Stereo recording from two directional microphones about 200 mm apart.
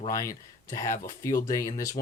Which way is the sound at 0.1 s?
15° left (ahead or behind).